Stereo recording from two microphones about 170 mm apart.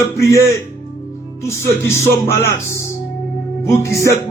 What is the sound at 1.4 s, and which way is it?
A man's voice, 15° left (ahead or behind).